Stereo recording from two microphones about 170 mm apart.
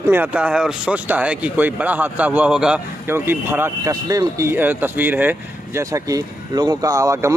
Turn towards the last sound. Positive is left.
turn(degrees=-15)  # may be behind; listen again after turning